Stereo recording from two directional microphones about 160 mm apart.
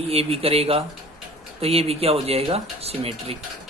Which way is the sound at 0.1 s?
40° right (ahead or behind).